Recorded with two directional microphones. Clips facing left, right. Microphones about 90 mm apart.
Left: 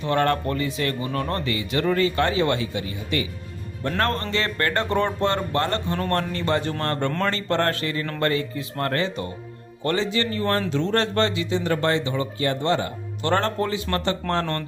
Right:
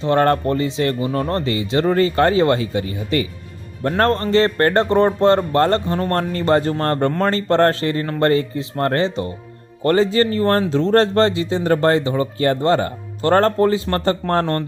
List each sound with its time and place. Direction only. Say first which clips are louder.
0.0 s speech: right 6 dB; 35° right (ahead or behind)